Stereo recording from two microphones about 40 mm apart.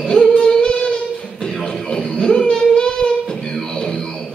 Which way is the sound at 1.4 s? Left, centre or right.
Centre.